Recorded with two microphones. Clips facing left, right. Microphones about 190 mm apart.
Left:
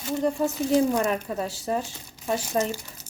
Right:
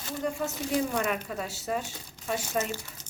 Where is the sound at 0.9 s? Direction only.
35° left (ahead or behind).